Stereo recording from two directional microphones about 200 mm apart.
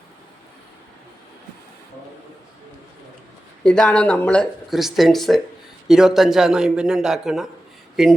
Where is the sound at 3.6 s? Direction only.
5° left (ahead or behind).